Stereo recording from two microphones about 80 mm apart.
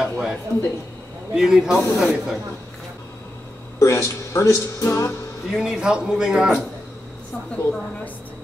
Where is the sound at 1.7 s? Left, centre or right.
Left.